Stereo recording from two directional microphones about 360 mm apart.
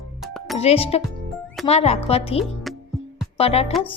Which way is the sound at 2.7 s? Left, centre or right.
Centre.